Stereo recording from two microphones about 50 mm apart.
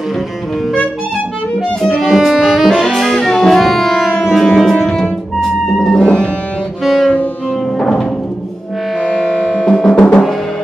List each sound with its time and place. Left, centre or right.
2.0 s saxophone: centre
3.6 s music: centre
6.8 s saxophone: centre
7.8 s music: centre
9.1 s music: centre
9.5 s music: centre